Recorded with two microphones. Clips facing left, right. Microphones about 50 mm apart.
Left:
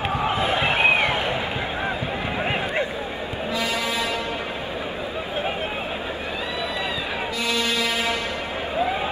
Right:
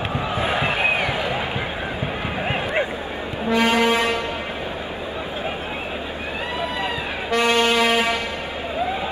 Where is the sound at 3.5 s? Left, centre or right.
Right.